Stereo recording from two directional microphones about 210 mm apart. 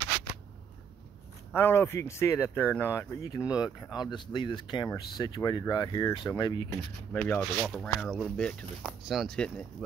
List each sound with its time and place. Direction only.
1.5 s speech: 10° left (ahead or behind)
7.1 s speech: 10° left (ahead or behind)